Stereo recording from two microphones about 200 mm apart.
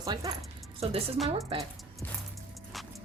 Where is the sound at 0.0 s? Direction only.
20° right (ahead or behind).